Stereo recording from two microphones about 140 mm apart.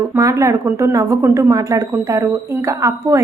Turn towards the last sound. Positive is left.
turn(degrees=-20)  # may be behind; listen again after turning